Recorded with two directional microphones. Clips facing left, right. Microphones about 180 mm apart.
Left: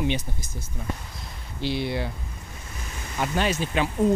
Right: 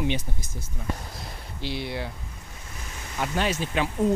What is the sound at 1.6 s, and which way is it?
Speech, 10° right (ahead or behind).